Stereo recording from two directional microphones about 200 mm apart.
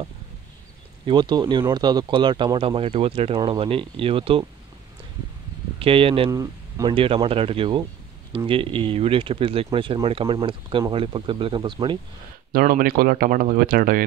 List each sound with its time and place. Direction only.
1.0 s speech: 20° right (ahead or behind)
5.8 s speech: 25° right (ahead or behind)
12.5 s speech: 45° right (ahead or behind)